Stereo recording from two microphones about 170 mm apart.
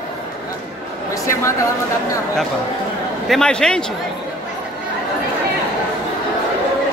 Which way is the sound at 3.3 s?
5° left (ahead or behind).